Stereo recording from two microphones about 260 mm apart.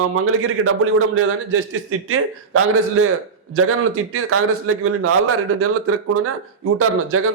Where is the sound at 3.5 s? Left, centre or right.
Right.